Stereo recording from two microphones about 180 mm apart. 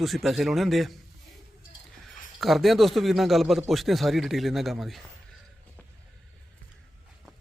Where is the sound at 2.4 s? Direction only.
Centre (ahead or behind).